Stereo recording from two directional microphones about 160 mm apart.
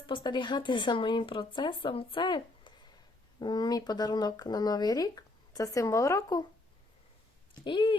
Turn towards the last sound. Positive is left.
turn(degrees=30)  # may be behind; listen again after turning